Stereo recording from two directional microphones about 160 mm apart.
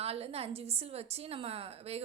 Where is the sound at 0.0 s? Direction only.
40° right (ahead or behind).